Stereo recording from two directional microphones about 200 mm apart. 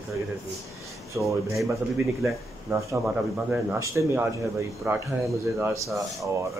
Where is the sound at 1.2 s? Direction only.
15° right (ahead or behind).